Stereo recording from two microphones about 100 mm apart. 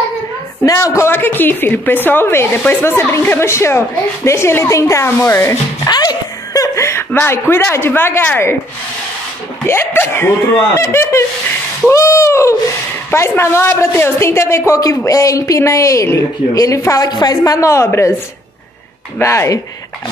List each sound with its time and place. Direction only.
0.7 s a woman's voice: 30° left (ahead or behind)
5.9 s a sound: 45° left (ahead or behind)
7.1 s a woman's voice: 20° left (ahead or behind)
9.7 s a woman's voice: 25° left (ahead or behind); by 17.4 s 40° left (ahead or behind)
17.5 s speech: 30° left (ahead or behind)
19.1 s a woman's voice: 25° left (ahead or behind)